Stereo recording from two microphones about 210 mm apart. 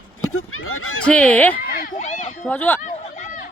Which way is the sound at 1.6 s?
45° left (ahead or behind).